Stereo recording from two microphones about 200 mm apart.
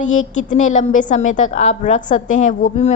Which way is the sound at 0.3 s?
40° left (ahead or behind).